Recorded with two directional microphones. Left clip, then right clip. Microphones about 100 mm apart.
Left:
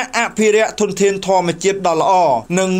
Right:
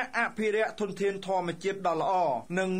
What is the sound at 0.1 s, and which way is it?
Speech, 40° left (ahead or behind).